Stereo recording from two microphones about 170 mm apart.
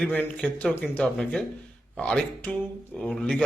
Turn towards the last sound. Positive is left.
turn(degrees=5)  # may be behind; listen again after turning